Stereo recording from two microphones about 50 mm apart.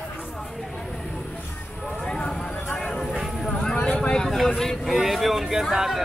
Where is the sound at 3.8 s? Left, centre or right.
Centre.